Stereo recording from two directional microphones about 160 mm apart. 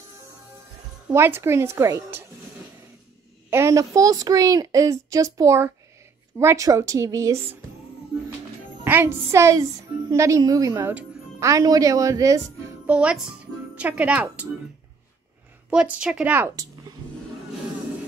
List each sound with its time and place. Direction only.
1.0 s a woman's voice: 15° right (ahead or behind)
3.4 s a woman's voice: 15° right (ahead or behind)
8.8 s a woman's voice: 15° right (ahead or behind)
12.8 s a child's voice: 5° right (ahead or behind)
15.7 s a woman's voice: 5° right (ahead or behind)